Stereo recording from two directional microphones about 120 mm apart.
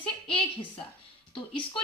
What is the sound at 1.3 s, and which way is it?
Speech, 45° left (ahead or behind).